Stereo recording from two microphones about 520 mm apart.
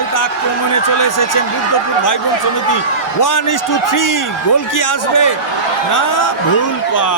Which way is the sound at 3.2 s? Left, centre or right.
Left.